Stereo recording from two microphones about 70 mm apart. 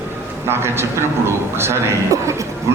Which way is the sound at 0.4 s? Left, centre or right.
Right.